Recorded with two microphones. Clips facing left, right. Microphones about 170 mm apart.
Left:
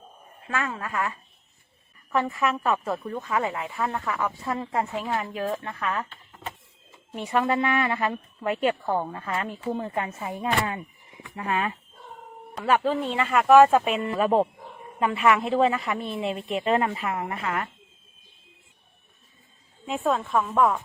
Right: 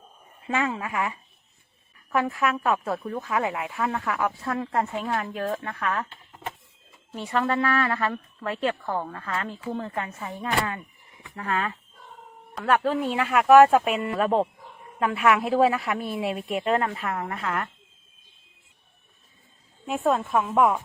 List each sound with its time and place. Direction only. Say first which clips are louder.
0.4 s a woman's voice: right 3 dB; 15° right (ahead or behind)
2.1 s speech: even; centre (ahead or behind)
7.3 s a woman's voice: left 1 dB; 15° left (ahead or behind)
12.5 s speech: even; 5° left (ahead or behind)
19.8 s a woman's voice: right 2 dB; 5° right (ahead or behind)